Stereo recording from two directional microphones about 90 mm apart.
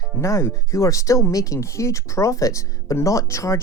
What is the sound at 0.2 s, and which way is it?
Speech, 35° left (ahead or behind).